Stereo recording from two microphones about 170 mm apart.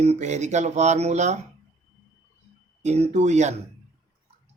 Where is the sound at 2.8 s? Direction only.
40° right (ahead or behind).